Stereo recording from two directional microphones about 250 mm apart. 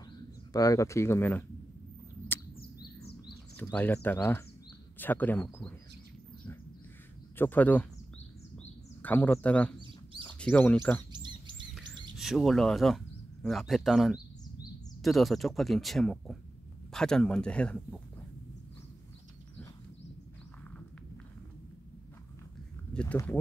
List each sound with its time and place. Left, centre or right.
0.5 s speech: centre
2.5 s a sound: left
3.5 s speech: centre
7.3 s speech: centre
9.0 s speech: centre
12.2 s speech: centre
22.9 s speech: centre